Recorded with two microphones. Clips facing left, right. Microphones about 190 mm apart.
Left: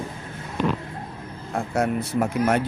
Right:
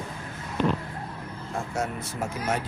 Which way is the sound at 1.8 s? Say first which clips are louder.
Left 9 dB; 60° left (ahead or behind).